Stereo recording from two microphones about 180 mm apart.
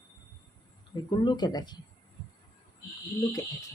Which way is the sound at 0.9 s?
25° left (ahead or behind).